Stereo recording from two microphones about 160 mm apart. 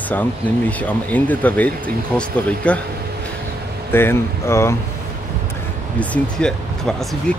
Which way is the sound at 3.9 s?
15° left (ahead or behind).